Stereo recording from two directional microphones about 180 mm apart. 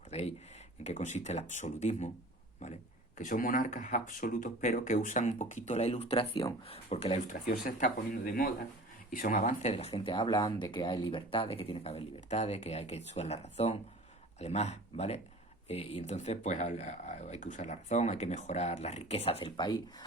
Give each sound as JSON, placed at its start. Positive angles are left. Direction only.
{"t": 0.1, "sound": "a sound", "side_deg": 35}
{"t": 0.9, "sound": "speech", "side_deg": 40}
{"t": 3.2, "sound": "speech", "side_deg": 50}